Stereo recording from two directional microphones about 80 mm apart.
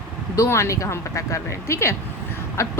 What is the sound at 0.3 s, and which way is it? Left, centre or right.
A woman's voice, left.